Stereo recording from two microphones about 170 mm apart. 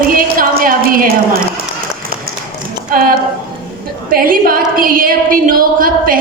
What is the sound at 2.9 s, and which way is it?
A woman's voice, 60° right (ahead or behind).